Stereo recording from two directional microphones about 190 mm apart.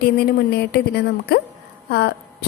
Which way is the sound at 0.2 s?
60° left (ahead or behind).